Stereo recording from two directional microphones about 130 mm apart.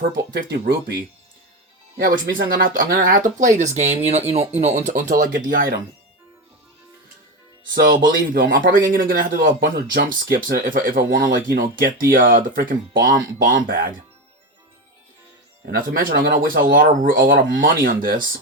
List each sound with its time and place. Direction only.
2.0 s speech: 90° right
3.6 s speech: 60° right (ahead or behind)
4.9 s speech: 85° right
7.9 s speech: 90° right
15.7 s speech: 90° right